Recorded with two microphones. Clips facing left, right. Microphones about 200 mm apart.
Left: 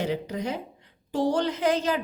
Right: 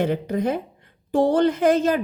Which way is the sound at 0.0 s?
55° right (ahead or behind).